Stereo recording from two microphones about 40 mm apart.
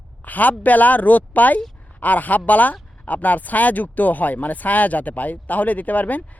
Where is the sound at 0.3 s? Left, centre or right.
Left.